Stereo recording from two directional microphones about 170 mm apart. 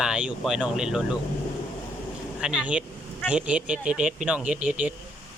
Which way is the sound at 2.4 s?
5° right (ahead or behind).